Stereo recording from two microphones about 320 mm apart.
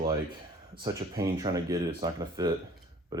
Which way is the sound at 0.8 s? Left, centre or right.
Centre.